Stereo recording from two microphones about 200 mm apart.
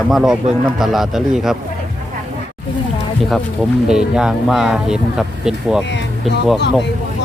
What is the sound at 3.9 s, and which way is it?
Speech, 5° right (ahead or behind).